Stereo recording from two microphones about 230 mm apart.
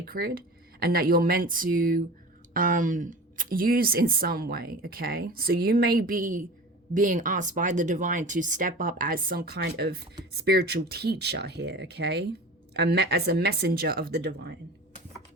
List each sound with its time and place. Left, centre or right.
0.0 s speech: right